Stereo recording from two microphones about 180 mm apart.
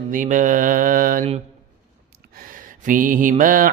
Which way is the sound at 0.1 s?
45° right (ahead or behind).